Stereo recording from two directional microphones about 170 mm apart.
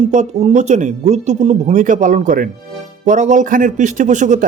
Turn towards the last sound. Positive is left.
turn(degrees=-45)  # may be behind; listen again after turning